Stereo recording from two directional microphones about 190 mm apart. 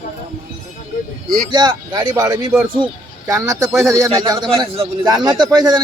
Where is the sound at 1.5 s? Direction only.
20° right (ahead or behind).